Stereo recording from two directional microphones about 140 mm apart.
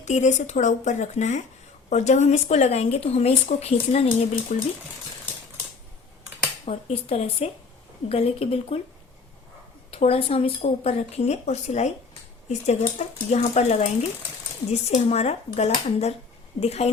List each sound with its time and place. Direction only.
0.0 s speech: 55° left (ahead or behind)
6.7 s speech: 45° left (ahead or behind)
9.9 s speech: 45° left (ahead or behind)